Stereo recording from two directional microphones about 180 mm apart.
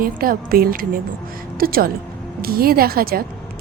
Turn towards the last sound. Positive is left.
turn(degrees=-55)  # may be behind; listen again after turning